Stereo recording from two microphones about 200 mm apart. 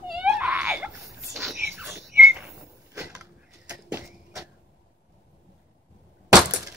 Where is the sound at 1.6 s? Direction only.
10° right (ahead or behind).